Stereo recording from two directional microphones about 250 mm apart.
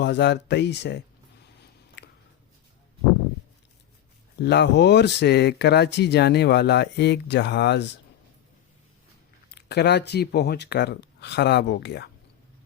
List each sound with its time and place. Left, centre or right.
0.0 s speech: left
2.0 s a sound: left
4.4 s speech: left
9.5 s speech: left